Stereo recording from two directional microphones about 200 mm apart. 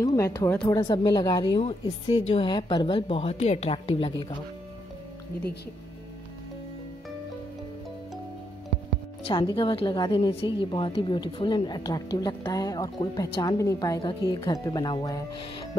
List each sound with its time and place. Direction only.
0.0 s speech: 15° left (ahead or behind)
9.3 s a woman's voice: 25° left (ahead or behind)